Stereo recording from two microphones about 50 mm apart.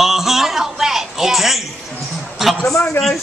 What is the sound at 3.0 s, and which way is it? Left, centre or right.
Speech, left.